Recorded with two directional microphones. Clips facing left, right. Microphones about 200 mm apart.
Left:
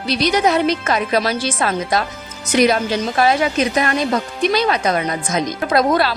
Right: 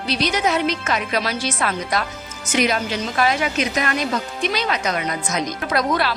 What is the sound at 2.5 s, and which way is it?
A woman's voice, 35° left (ahead or behind).